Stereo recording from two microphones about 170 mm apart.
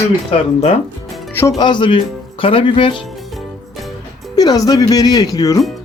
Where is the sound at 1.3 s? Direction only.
15° left (ahead or behind).